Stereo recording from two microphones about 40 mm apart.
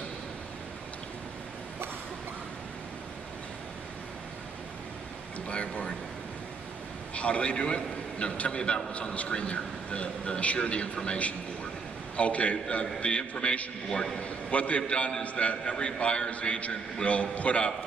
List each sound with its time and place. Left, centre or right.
5.5 s a man's voice: left
7.2 s a man's voice: left